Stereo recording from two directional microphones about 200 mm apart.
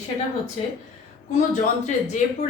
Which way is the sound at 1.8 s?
35° left (ahead or behind).